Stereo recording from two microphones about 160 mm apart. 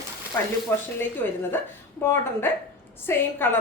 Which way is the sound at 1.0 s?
15° left (ahead or behind).